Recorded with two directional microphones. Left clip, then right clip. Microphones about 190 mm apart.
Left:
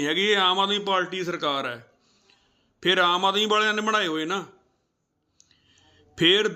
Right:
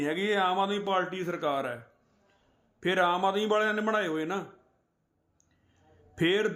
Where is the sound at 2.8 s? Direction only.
15° right (ahead or behind).